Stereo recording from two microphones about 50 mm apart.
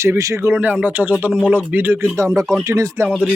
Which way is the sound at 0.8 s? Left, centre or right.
Right.